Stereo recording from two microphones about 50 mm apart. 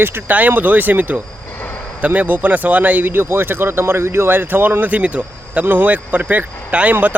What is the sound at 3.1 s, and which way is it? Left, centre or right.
Speech, right.